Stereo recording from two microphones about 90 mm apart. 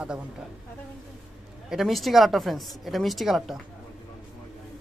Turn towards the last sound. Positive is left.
turn(degrees=0)  # may be behind; listen again after turning